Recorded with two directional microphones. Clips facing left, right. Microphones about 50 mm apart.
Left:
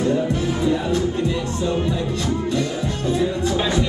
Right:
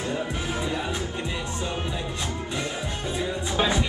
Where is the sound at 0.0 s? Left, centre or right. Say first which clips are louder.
Left 9 dB; right.